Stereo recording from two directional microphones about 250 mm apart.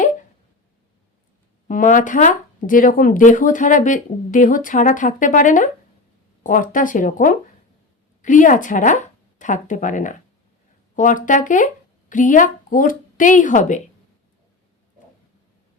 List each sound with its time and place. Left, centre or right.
1.6 s speech: left